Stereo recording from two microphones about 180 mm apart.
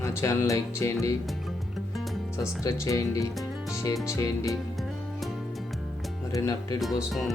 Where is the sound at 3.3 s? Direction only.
Centre (ahead or behind).